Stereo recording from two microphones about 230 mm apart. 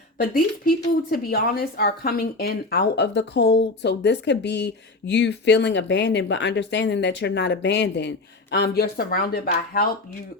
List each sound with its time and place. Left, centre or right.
0.2 s speech: left